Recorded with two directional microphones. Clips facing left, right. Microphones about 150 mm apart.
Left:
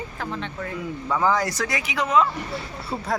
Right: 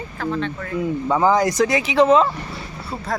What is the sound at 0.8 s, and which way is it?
Speech, 25° right (ahead or behind).